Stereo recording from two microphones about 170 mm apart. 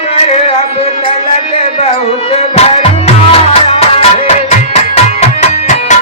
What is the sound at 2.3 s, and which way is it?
Music, 35° left (ahead or behind).